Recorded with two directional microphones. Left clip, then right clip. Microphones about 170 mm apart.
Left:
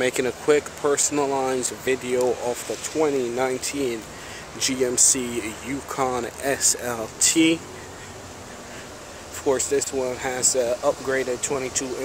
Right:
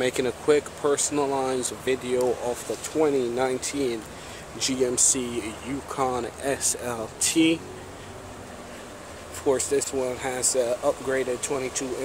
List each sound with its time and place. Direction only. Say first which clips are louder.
0.0 s speech: left 2 dB; centre (ahead or behind)
9.5 s speech: left 1 dB; centre (ahead or behind)